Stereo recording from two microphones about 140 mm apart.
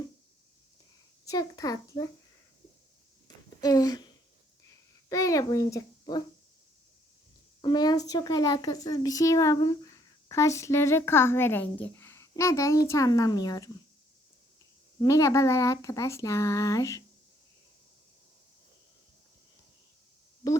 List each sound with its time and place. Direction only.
1.2 s speech: 25° left (ahead or behind)
3.6 s a child's voice: 25° left (ahead or behind)
7.6 s speech: 30° left (ahead or behind)
15.0 s speech: 25° left (ahead or behind)